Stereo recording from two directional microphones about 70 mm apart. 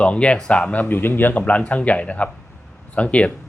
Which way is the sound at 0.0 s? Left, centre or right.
Centre.